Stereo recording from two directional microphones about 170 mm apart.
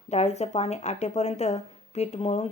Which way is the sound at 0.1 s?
40° left (ahead or behind).